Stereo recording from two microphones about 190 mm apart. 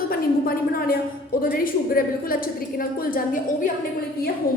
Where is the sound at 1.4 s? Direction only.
50° left (ahead or behind).